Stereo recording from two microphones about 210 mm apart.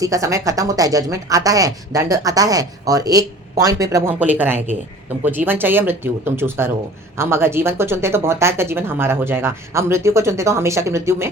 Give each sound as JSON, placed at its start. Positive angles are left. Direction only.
{"t": 0.0, "sound": "speech", "side_deg": -15}